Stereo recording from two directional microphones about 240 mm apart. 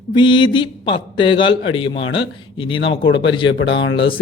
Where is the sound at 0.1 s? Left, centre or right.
Centre.